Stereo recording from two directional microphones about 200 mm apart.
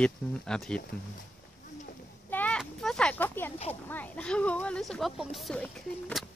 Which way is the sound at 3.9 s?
10° left (ahead or behind).